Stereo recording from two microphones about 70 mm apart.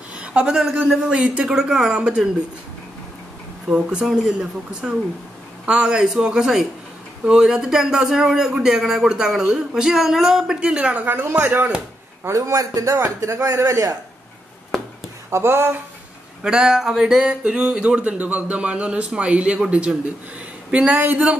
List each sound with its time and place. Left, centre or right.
0.1 s a sound: centre
0.8 s a man's voice: centre
3.6 s a man's voice: centre
12.3 s a man's voice: right
13.2 s a man's voice: right
15.2 s speech: right
16.4 s a man's voice: centre